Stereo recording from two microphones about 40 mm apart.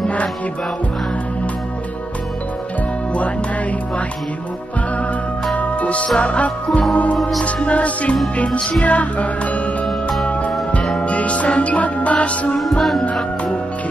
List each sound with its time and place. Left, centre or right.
0.0 s music: left
5.6 s music: left
7.2 s music: centre
7.4 s music: left
8.5 s music: left
8.8 s music: left